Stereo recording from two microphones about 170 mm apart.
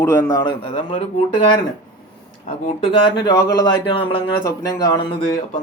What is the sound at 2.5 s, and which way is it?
Speech, 35° left (ahead or behind).